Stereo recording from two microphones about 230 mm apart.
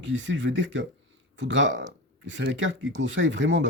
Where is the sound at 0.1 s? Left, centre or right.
Right.